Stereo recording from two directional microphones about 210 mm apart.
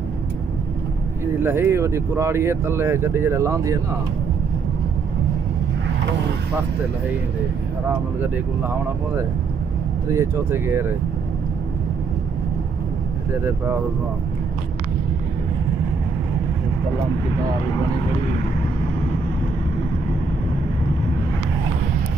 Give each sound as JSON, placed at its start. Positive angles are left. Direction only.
{"t": 1.2, "sound": "speech", "side_deg": -10}
{"t": 10.0, "sound": "speech", "side_deg": -15}